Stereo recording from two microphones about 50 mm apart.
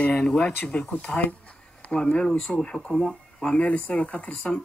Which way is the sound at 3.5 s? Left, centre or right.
Left.